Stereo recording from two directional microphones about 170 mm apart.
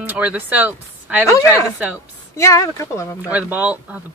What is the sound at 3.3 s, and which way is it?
Speech, 10° right (ahead or behind).